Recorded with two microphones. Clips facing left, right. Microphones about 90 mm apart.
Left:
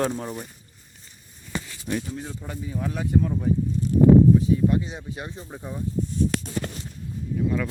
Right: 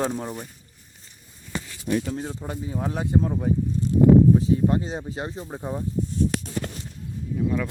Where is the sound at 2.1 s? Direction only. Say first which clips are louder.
Right 3 dB; 35° right (ahead or behind).